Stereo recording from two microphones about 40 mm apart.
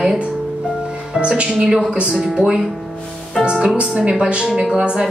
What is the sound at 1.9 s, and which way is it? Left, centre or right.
Speech, right.